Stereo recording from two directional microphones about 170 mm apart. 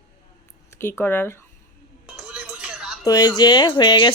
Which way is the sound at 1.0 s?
10° left (ahead or behind).